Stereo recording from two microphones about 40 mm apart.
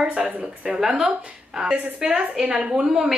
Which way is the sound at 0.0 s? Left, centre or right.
Right.